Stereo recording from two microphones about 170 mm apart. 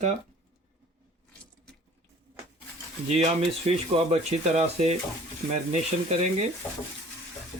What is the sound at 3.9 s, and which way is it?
Speech, 40° right (ahead or behind).